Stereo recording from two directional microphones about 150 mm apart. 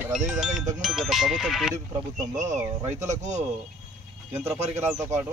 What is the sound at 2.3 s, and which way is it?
Speech, 55° right (ahead or behind).